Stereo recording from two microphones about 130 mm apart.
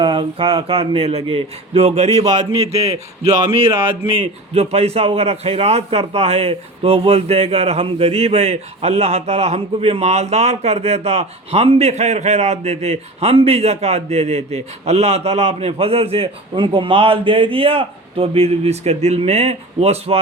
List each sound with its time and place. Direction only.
0.0 s a man's voice: 40° right (ahead or behind)
2.8 s a man's voice: 25° right (ahead or behind)
4.2 s a man's voice: 50° right (ahead or behind)